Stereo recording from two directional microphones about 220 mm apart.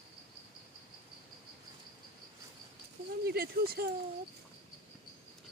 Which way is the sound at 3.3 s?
45° right (ahead or behind).